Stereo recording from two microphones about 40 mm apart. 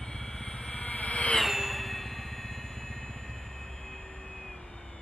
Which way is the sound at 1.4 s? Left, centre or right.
Centre.